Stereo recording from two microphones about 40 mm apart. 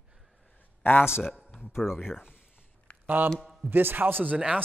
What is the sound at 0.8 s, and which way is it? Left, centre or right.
Speech, left.